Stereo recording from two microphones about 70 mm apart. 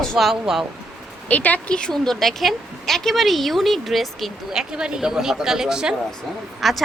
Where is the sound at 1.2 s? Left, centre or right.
Left; by 5.9 s centre.